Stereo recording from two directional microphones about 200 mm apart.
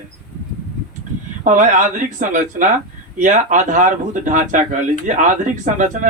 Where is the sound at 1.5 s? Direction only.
40° right (ahead or behind).